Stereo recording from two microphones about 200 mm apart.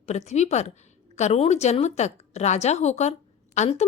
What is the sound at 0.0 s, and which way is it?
A woman's voice, 35° left (ahead or behind).